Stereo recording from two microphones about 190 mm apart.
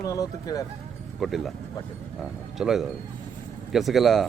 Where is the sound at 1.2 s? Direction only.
Centre (ahead or behind).